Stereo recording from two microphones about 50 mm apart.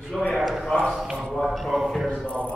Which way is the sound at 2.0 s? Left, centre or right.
Left.